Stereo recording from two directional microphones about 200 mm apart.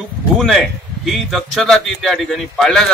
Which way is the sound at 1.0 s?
Centre (ahead or behind).